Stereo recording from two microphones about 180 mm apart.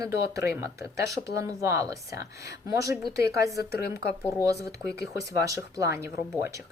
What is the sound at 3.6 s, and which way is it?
Speech, 60° left (ahead or behind).